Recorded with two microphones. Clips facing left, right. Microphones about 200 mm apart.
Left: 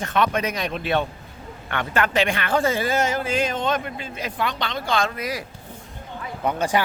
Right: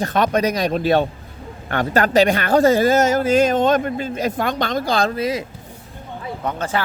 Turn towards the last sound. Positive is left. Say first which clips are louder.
# left 1 dB
turn(degrees=15)  # may be behind; listen again after turning